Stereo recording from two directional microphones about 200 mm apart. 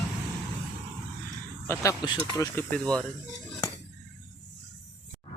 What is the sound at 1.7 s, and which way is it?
Speech, 15° left (ahead or behind).